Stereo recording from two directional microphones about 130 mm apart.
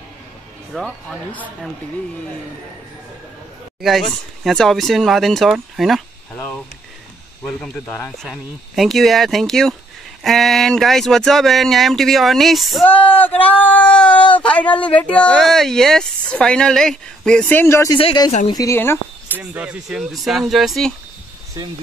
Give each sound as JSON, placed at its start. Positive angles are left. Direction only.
{"t": 0.7, "sound": "speech", "side_deg": 0}
{"t": 3.8, "sound": "speech", "side_deg": 0}
{"t": 6.3, "sound": "speech", "side_deg": 15}
{"t": 7.8, "sound": "speech", "side_deg": 20}
{"t": 8.2, "sound": "speech", "side_deg": 0}
{"t": 12.8, "sound": "speech", "side_deg": 10}
{"t": 17.9, "sound": "speech", "side_deg": 40}
{"t": 18.5, "sound": "speech", "side_deg": 25}
{"t": 19.3, "sound": "speech", "side_deg": -10}
{"t": 21.6, "sound": "speech", "side_deg": -30}